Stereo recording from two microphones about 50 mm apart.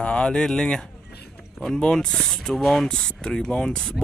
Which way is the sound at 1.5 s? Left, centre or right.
Centre.